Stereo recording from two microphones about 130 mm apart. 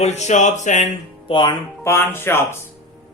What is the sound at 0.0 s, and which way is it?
Speech, 60° left (ahead or behind).